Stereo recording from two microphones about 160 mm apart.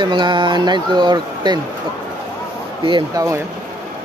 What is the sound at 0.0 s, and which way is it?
Speech, 30° right (ahead or behind).